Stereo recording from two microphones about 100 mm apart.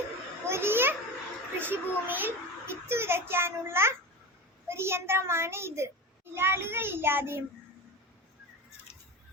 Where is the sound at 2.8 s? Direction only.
25° right (ahead or behind).